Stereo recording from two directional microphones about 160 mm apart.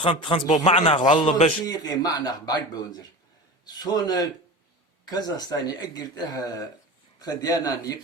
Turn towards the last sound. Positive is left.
turn(degrees=25)  # may be behind; listen again after turning